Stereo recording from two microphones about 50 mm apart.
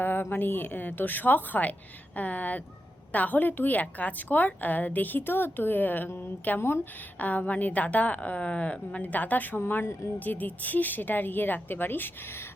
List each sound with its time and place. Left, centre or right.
0.0 s a woman's voice: left
6.6 s a woman's voice: left
7.2 s a woman's voice: left